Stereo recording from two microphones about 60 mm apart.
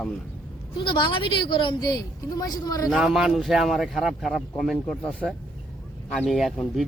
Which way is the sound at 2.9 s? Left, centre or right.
Centre.